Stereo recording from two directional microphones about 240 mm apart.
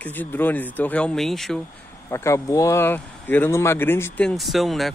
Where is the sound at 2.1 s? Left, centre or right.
Centre.